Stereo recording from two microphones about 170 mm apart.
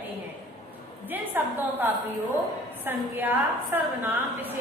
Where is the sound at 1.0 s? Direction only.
10° right (ahead or behind).